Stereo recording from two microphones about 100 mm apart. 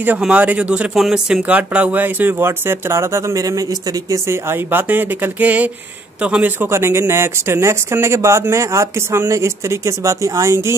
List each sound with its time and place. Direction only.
0.2 s speech: 15° right (ahead or behind); by 4.2 s 35° right (ahead or behind)
4.3 s speech: 25° right (ahead or behind)